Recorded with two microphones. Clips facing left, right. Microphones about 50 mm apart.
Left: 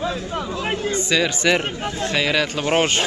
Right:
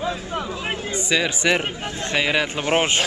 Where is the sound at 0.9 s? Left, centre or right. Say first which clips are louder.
Left 1 dB; centre.